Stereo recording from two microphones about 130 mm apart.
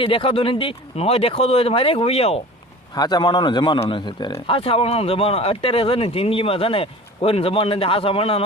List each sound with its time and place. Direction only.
0.0 s speech: 45° left (ahead or behind)
2.9 s a man's voice: 30° left (ahead or behind)